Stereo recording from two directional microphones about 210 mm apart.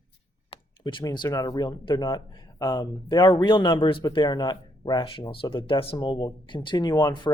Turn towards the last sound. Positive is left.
turn(degrees=20)  # may be behind; listen again after turning